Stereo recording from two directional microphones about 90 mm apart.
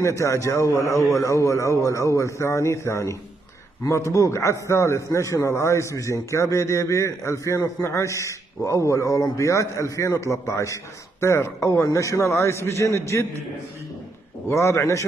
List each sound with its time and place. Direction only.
0.0 s a man's voice: 35° left (ahead or behind)
14.5 s a man's voice: 35° left (ahead or behind)